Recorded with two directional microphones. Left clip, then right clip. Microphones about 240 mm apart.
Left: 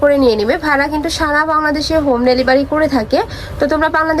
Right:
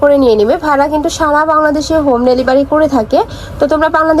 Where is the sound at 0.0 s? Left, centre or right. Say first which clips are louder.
Right 3 dB; centre.